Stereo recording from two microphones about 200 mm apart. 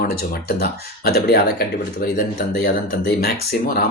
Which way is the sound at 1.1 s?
50° left (ahead or behind).